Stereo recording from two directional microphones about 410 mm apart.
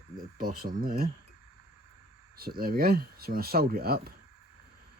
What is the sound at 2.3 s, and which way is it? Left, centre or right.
Speech, right.